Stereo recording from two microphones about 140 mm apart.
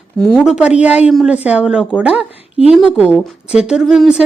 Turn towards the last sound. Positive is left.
turn(degrees=-5)  # may be behind; listen again after turning